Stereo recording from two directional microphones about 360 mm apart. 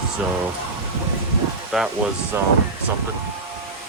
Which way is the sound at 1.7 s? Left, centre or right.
Centre.